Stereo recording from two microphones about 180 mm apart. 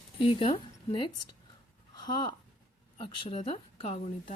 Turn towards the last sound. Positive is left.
turn(degrees=35)  # may be behind; listen again after turning